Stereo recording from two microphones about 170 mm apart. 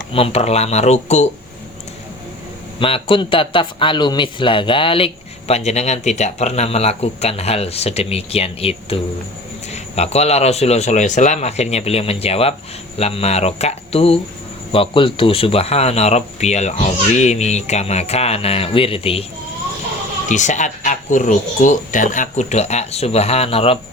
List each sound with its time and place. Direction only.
0.1 s a man's voice: 35° left (ahead or behind)
2.7 s a man's voice: 35° left (ahead or behind)
20.2 s speech: 45° left (ahead or behind)